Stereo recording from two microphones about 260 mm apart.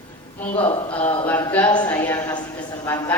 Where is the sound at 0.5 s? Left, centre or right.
Left.